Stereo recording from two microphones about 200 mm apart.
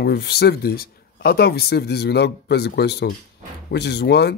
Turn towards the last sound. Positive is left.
turn(degrees=55)  # may be behind; listen again after turning